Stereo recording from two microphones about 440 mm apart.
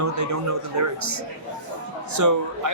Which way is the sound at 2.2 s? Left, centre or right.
Right.